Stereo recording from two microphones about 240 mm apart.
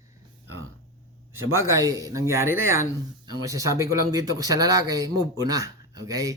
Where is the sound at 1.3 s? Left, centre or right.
Centre.